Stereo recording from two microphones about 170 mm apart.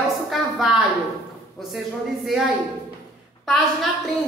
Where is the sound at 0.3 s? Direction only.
5° right (ahead or behind).